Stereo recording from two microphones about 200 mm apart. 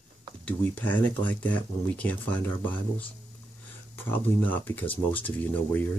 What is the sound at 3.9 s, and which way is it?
Speech, 10° left (ahead or behind).